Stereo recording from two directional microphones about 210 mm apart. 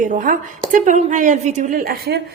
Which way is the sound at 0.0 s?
40° right (ahead or behind).